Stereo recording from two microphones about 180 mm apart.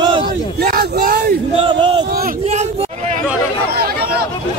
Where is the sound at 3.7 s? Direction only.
60° right (ahead or behind).